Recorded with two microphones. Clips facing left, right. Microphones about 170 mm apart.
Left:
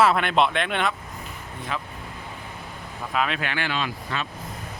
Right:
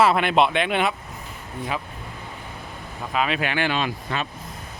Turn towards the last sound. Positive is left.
turn(degrees=-20)  # may be behind; listen again after turning